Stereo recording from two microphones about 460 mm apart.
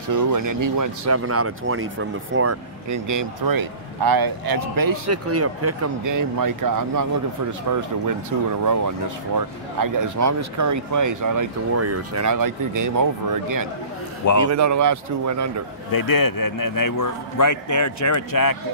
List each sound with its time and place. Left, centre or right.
0.1 s speech: right
5.1 s speech: right
8.6 s speech: right
15.9 s a man's voice: left